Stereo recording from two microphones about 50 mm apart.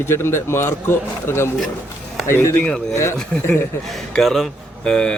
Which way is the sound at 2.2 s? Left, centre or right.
Left.